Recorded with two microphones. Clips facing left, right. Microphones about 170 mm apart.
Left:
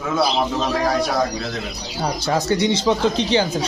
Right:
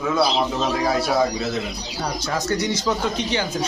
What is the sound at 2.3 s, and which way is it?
Speech, 25° left (ahead or behind).